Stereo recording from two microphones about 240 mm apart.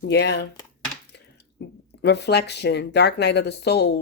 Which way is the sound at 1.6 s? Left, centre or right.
Left.